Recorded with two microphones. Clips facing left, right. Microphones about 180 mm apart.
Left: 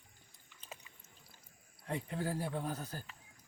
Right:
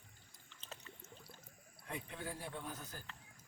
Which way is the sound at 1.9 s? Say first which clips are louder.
Left 8 dB; 35° left (ahead or behind).